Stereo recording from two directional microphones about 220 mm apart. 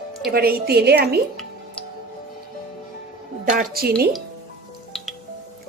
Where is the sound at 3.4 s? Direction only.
40° right (ahead or behind).